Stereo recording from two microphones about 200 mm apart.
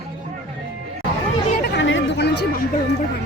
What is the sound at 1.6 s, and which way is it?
Chatter, 65° left (ahead or behind).